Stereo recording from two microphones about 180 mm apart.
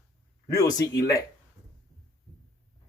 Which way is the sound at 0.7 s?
20° left (ahead or behind).